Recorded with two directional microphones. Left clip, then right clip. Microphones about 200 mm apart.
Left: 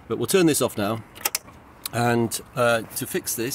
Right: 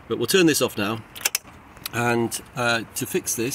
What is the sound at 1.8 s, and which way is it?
Speech, 60° left (ahead or behind).